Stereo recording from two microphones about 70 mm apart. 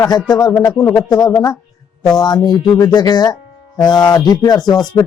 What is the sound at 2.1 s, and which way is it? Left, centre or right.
Speech, left.